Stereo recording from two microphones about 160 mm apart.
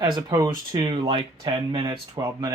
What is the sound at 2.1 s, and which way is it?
Speech, 15° right (ahead or behind).